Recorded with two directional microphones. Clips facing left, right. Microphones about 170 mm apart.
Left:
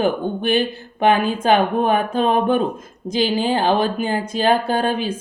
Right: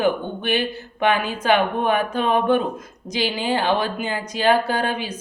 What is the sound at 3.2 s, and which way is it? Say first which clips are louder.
Speech: left 4 dB; 50° left (ahead or behind).